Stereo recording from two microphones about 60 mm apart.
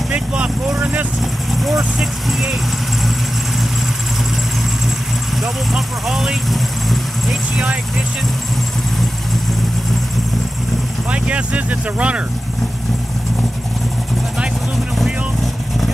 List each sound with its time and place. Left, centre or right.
0.1 s vehicle: centre
1.5 s vehicle: centre
5.4 s vehicle: centre
11.1 s vehicle: right